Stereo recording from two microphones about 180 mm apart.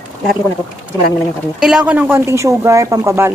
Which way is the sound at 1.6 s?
5° right (ahead or behind).